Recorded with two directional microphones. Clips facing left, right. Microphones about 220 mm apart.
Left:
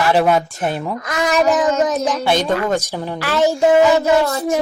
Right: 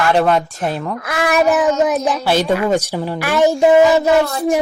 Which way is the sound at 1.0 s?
10° right (ahead or behind).